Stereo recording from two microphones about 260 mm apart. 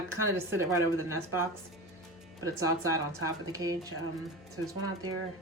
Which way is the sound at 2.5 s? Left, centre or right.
Centre.